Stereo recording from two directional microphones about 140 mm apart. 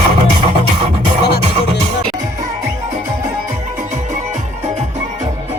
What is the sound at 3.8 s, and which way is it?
Music, 60° right (ahead or behind).